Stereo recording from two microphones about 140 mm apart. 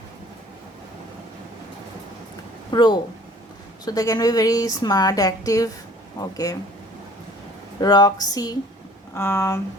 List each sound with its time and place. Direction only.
2.7 s a woman's voice: 30° left (ahead or behind)
7.8 s a woman's voice: 30° left (ahead or behind)